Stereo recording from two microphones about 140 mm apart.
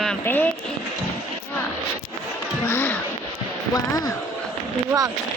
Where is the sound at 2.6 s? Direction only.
15° left (ahead or behind).